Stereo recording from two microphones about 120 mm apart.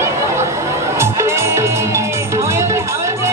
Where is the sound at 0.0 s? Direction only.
25° right (ahead or behind).